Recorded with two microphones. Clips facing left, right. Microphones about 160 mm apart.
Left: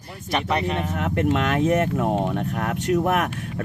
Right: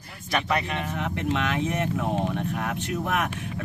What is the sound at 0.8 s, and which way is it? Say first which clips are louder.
Speech: left 6 dB; 50° left (ahead or behind).